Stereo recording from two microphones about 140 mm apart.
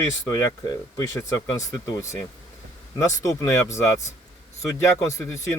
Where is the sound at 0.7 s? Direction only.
25° left (ahead or behind).